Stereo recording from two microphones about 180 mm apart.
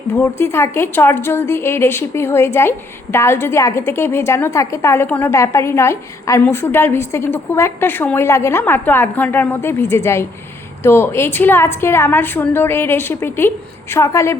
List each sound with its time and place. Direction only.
0.1 s a woman's voice: 15° left (ahead or behind)